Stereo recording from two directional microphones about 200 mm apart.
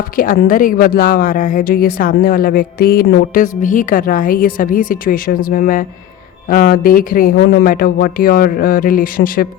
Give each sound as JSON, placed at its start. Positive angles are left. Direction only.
{"t": 0.2, "sound": "a woman's voice", "side_deg": 45}